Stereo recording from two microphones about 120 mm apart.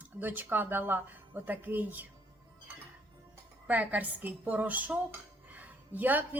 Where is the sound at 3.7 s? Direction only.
15° right (ahead or behind).